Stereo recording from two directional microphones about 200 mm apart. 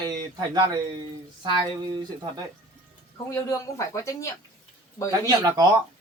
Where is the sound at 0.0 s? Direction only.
20° right (ahead or behind).